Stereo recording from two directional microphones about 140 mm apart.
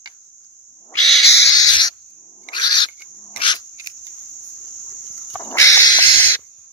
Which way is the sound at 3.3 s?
35° left (ahead or behind).